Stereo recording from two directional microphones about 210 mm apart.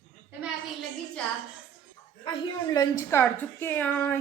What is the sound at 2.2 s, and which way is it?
A woman's voice, 20° left (ahead or behind).